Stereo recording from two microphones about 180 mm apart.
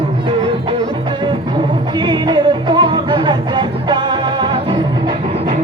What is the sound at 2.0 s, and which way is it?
Music, 25° right (ahead or behind).